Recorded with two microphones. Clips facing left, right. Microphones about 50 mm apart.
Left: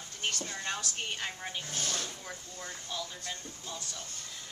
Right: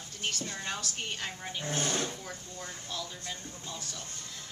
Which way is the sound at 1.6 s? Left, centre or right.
Right.